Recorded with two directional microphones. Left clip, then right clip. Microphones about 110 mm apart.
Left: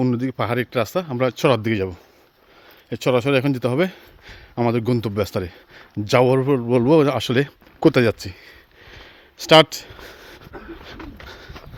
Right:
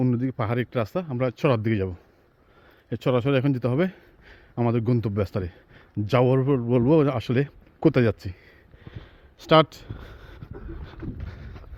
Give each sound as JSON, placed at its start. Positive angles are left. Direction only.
{"t": 0.0, "sound": "speech", "side_deg": 25}
{"t": 0.9, "sound": "speech", "side_deg": 40}
{"t": 8.0, "sound": "a sound", "side_deg": 20}